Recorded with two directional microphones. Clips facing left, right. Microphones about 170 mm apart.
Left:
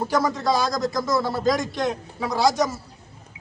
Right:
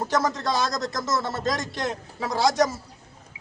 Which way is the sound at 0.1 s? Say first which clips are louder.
Left 3 dB; centre (ahead or behind).